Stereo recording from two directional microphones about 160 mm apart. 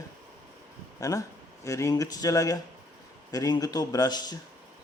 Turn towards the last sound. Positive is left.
turn(degrees=25)  # may be behind; listen again after turning